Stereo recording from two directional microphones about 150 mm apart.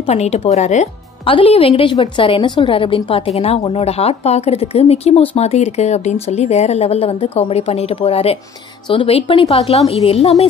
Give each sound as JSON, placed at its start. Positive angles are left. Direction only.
{"t": 0.0, "sound": "a woman's voice", "side_deg": 45}
{"t": 1.2, "sound": "a woman's voice", "side_deg": 35}